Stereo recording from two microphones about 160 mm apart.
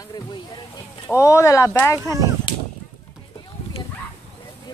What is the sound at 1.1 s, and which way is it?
Speech, 20° left (ahead or behind).